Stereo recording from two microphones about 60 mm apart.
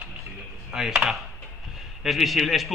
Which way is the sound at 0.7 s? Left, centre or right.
Centre.